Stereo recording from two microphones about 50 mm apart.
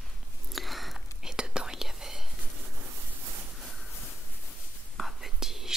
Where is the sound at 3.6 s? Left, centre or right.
Centre.